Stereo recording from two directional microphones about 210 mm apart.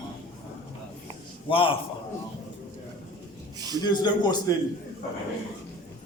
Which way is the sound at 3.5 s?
20° right (ahead or behind).